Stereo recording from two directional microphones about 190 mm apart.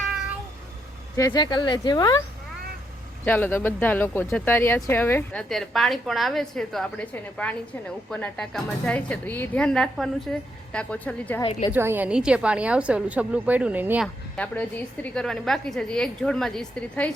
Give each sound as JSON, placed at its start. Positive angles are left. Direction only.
{"t": 1.1, "sound": "speech", "side_deg": 20}
{"t": 3.2, "sound": "a woman's voice", "side_deg": 10}
{"t": 11.7, "sound": "a woman's voice", "side_deg": -10}
{"t": 14.3, "sound": "a woman's voice", "side_deg": 10}